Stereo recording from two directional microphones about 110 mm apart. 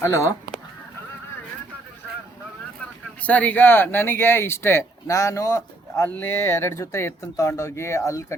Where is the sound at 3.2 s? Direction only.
15° left (ahead or behind).